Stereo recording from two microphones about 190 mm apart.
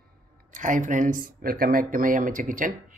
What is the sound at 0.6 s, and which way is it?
Speech, 45° right (ahead or behind).